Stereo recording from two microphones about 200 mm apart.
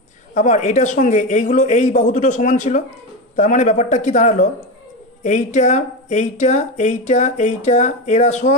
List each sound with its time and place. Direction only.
0.3 s speech: 35° left (ahead or behind)